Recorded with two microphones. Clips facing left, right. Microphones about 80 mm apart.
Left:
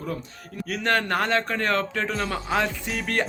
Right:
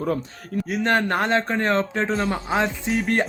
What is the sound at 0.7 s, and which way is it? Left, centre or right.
A man's voice, right.